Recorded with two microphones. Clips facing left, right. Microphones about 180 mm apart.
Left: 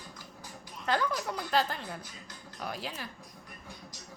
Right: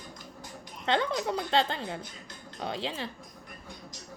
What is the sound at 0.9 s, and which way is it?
A child's voice, 25° right (ahead or behind).